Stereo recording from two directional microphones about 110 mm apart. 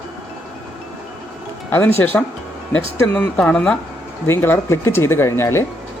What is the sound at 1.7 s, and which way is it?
A woman's voice, 20° left (ahead or behind).